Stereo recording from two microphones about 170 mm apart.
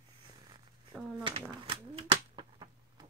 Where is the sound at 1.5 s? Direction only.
30° right (ahead or behind).